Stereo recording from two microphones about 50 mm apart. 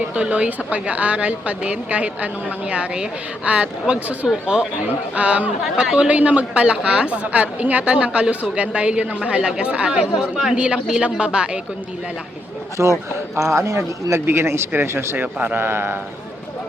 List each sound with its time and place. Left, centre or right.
0.1 s a woman's voice: right
12.8 s speech: right
14.3 s speech: right